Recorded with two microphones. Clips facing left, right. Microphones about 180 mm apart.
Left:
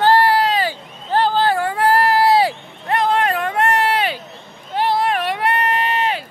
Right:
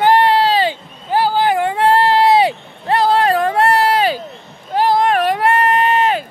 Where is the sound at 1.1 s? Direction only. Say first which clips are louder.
Right 2 dB; 10° right (ahead or behind); by 6.2 s 45° right (ahead or behind).